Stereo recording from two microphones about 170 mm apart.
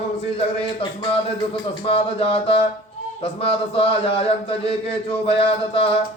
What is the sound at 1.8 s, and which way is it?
Speech, 35° left (ahead or behind).